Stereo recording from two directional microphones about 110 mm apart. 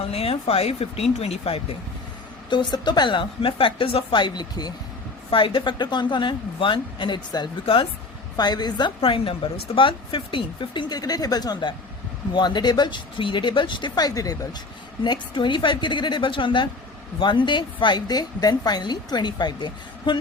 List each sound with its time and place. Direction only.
0.0 s speech: 65° left (ahead or behind)
2.5 s a woman's voice: 45° left (ahead or behind)
5.3 s a woman's voice: 50° left (ahead or behind)
8.4 s a woman's voice: 40° left (ahead or behind)
9.0 s a woman's voice: 55° left (ahead or behind)